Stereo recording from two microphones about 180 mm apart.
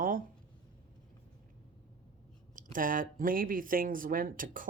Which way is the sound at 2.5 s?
50° right (ahead or behind).